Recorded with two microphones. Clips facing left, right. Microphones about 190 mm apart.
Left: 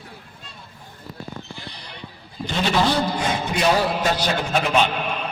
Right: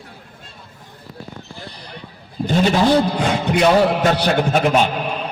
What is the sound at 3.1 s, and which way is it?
A man's voice, 65° right (ahead or behind).